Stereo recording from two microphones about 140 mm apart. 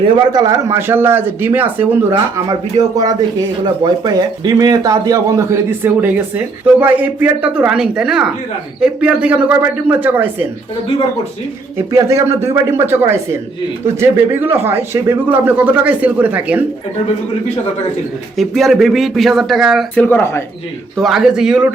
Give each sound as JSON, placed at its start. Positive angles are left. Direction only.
{"t": 0.3, "sound": "a man's voice", "side_deg": -25}
{"t": 2.1, "sound": "a man's voice", "side_deg": -25}
{"t": 11.9, "sound": "a man's voice", "side_deg": -20}
{"t": 18.3, "sound": "speech", "side_deg": 0}
{"t": 20.0, "sound": "speech", "side_deg": 15}
{"t": 20.9, "sound": "speech", "side_deg": 0}